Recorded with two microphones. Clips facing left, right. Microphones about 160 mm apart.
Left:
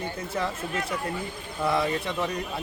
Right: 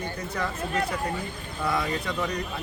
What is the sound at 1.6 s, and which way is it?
Speech, 25° left (ahead or behind).